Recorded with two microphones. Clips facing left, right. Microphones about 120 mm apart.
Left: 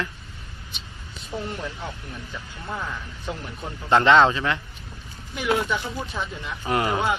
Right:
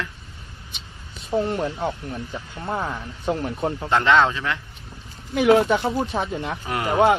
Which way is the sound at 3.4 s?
55° right (ahead or behind).